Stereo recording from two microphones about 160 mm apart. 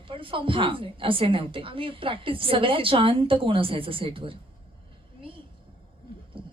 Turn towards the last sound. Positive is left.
turn(degrees=-30)  # may be behind; listen again after turning